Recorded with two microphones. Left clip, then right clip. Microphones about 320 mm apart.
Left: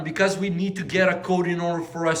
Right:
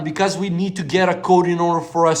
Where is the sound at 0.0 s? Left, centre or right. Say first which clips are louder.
Right 2 dB; centre.